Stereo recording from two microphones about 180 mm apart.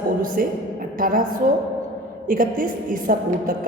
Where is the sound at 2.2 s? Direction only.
50° right (ahead or behind).